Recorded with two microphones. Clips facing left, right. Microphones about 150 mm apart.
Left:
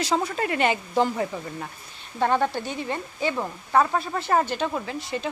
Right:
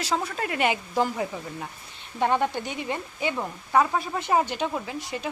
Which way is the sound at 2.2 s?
15° right (ahead or behind).